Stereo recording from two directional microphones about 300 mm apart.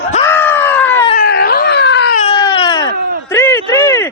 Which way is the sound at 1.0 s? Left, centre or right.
Left.